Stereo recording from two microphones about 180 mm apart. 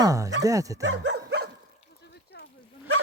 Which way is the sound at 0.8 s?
75° right (ahead or behind).